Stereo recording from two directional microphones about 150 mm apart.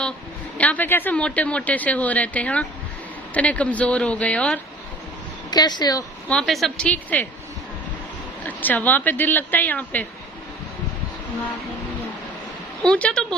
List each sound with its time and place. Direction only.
0.6 s speech: 10° left (ahead or behind)
5.5 s speech: 25° left (ahead or behind)
6.2 s speech: 5° left (ahead or behind)
8.5 s speech: 10° left (ahead or behind)
12.8 s speech: 5° left (ahead or behind)